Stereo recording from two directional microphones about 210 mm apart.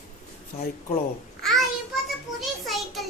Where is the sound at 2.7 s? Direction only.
Centre (ahead or behind).